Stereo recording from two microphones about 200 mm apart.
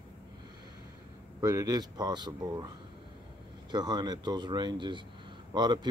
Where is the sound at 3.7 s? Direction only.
20° right (ahead or behind).